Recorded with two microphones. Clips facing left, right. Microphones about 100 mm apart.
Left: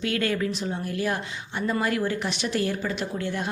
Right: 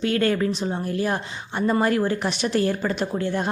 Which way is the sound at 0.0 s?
35° right (ahead or behind).